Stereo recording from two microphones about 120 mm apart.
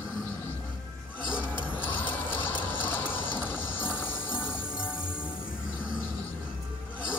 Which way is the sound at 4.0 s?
15° left (ahead or behind).